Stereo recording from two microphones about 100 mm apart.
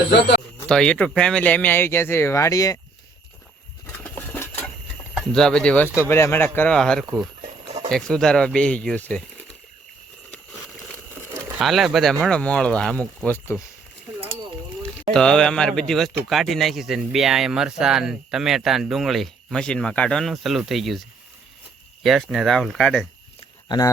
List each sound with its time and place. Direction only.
0.7 s speech: 10° left (ahead or behind); by 2.7 s 35° left (ahead or behind)
4.0 s a sound: 20° left (ahead or behind)
5.3 s speech: 5° left (ahead or behind)
5.9 s speech: 25° left (ahead or behind)
6.7 s speech: 5° left (ahead or behind)
11.6 s speech: centre (ahead or behind); by 13.4 s 15° left (ahead or behind)
15.1 s speech: 5° left (ahead or behind)
22.0 s speech: centre (ahead or behind)
23.6 s speech: 40° left (ahead or behind)